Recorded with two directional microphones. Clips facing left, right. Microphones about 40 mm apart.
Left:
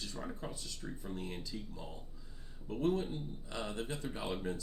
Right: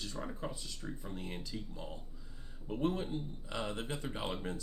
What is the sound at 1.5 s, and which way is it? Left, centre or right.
Speech, right.